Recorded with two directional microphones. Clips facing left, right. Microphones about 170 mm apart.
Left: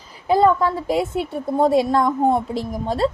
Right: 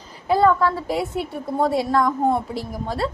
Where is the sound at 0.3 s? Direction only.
20° left (ahead or behind).